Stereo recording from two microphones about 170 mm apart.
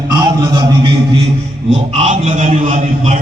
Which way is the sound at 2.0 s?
45° right (ahead or behind).